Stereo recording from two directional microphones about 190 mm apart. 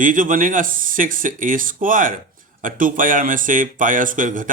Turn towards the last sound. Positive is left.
turn(degrees=-45)  # may be behind; listen again after turning